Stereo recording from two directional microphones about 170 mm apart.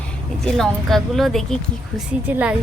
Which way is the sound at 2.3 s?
10° right (ahead or behind).